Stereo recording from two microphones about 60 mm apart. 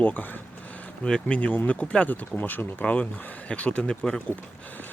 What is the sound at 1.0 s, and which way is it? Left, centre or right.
Speech, centre.